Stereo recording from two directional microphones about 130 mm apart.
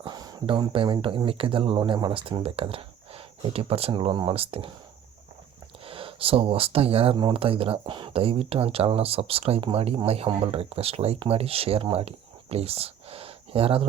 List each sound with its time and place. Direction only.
0.0 s speech: 30° right (ahead or behind)
5.8 s speech: 45° right (ahead or behind)